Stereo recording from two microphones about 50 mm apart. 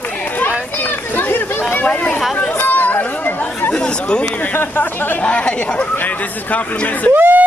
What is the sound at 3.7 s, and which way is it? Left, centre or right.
Chatter, left.